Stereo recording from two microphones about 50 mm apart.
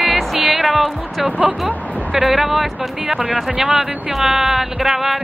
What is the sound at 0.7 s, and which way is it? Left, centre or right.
Speech, centre.